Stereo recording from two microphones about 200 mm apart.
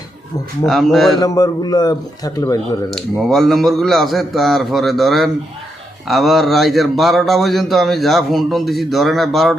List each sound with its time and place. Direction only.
0.6 s a man's voice: centre (ahead or behind)
1.2 s a man's voice: 20° left (ahead or behind)
2.9 s a man's voice: centre (ahead or behind)